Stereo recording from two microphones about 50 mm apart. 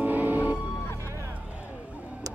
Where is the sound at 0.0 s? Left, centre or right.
Right.